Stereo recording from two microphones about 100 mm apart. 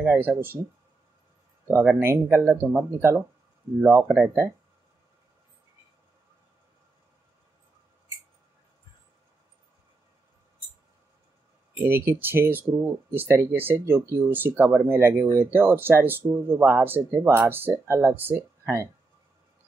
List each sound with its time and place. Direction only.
0.0 s speech: 20° right (ahead or behind)
1.8 s speech: 20° right (ahead or behind)
11.8 s speech: 25° right (ahead or behind)